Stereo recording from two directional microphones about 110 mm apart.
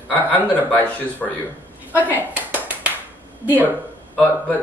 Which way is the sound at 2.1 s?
15° right (ahead or behind).